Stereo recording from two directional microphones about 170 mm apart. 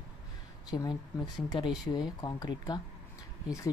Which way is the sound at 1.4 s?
25° left (ahead or behind).